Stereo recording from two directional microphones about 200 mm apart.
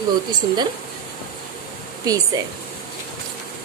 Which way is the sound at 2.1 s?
15° right (ahead or behind).